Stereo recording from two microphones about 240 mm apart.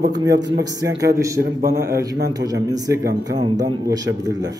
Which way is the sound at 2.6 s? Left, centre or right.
Centre.